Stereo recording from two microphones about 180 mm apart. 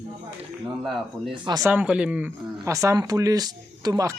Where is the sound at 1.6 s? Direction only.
5° right (ahead or behind).